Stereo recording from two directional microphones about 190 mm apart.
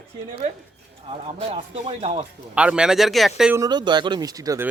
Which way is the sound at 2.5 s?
5° right (ahead or behind).